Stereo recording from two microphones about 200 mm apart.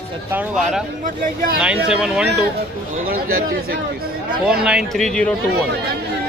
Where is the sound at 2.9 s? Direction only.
45° right (ahead or behind).